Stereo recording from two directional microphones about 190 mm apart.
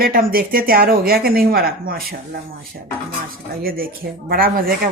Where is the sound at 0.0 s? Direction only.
50° right (ahead or behind).